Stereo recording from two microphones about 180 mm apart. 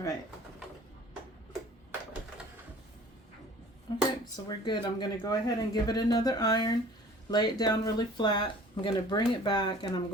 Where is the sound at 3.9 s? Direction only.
25° left (ahead or behind).